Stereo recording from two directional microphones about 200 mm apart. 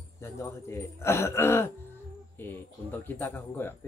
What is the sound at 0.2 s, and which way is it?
Speech, 15° left (ahead or behind).